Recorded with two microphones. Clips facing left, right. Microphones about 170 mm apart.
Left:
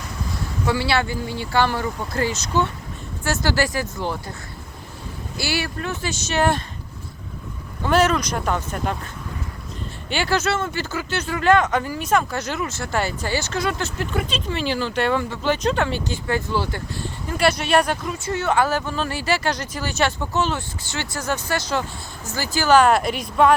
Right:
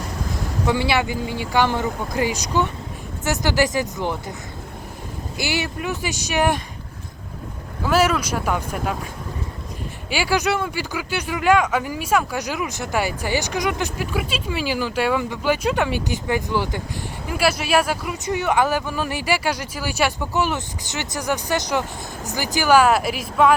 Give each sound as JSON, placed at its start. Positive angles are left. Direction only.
{"t": 0.7, "sound": "speech", "side_deg": -15}
{"t": 5.4, "sound": "speech", "side_deg": -20}
{"t": 7.9, "sound": "speech", "side_deg": -5}
{"t": 10.1, "sound": "speech", "side_deg": -10}